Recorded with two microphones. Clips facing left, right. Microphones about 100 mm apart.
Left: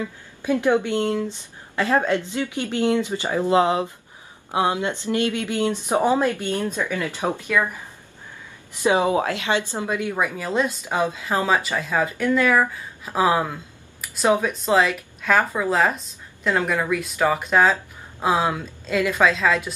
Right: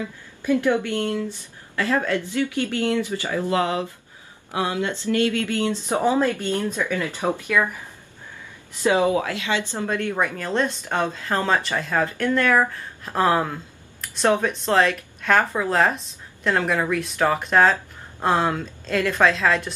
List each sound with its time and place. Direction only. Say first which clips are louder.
0.4 s speech: left 1 dB; 20° left (ahead or behind); by 19.7 s 5° left (ahead or behind)